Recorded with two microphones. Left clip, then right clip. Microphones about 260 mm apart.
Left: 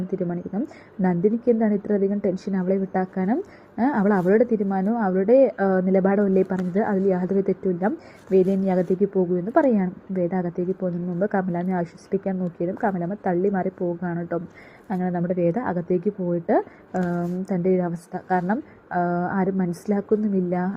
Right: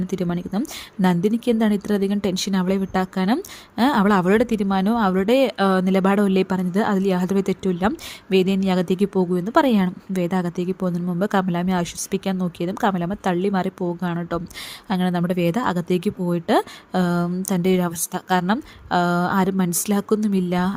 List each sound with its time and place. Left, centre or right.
0.2 s speech: right